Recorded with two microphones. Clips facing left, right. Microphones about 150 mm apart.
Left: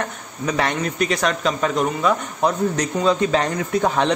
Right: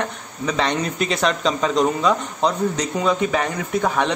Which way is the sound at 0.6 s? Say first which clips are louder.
Even; 25° right (ahead or behind).